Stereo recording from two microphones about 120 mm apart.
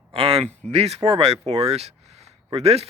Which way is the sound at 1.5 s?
60° right (ahead or behind).